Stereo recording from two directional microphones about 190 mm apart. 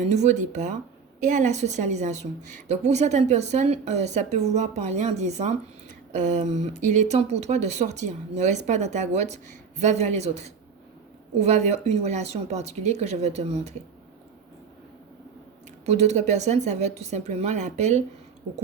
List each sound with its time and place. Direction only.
0.0 s a woman's voice: 35° right (ahead or behind)
15.9 s a woman's voice: 35° right (ahead or behind)